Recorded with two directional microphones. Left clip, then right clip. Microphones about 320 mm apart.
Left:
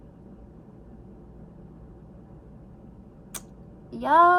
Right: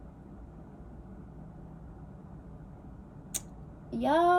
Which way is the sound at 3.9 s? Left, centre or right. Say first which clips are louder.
Left 7 dB; centre.